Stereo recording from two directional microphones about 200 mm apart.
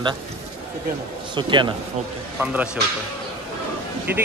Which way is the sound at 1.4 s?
25° right (ahead or behind).